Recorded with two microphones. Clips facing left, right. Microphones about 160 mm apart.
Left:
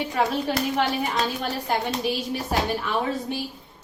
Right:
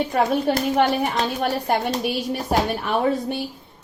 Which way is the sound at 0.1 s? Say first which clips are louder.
Right 3 dB; 50° right (ahead or behind).